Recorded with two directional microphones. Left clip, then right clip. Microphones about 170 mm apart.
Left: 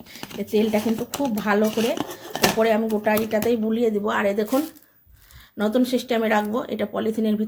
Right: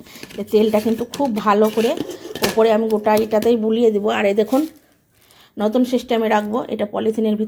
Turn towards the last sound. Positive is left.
turn(degrees=0)  # may be behind; listen again after turning